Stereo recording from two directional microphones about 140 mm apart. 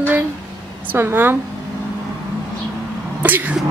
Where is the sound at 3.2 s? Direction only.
10° right (ahead or behind).